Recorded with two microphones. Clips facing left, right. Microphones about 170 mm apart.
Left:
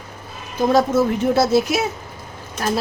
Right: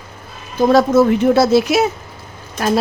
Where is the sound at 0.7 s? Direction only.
75° right (ahead or behind).